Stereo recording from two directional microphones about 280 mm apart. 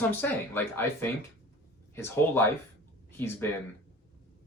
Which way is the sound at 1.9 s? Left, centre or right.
Centre.